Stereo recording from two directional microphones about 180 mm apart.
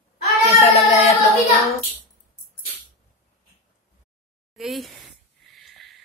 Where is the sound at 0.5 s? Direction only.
35° left (ahead or behind).